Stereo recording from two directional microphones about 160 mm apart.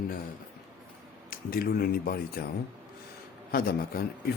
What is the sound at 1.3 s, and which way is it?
Speech, 65° left (ahead or behind).